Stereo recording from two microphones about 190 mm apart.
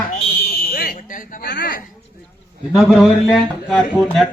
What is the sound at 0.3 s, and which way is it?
Fire alarm, 50° left (ahead or behind).